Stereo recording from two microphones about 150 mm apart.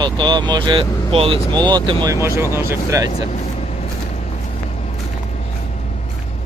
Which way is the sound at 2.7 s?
20° right (ahead or behind).